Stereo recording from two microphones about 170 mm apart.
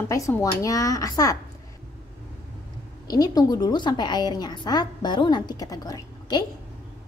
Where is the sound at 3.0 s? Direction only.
25° left (ahead or behind).